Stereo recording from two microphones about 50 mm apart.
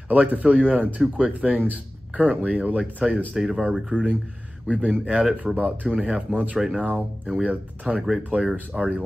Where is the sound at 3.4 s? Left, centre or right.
Centre.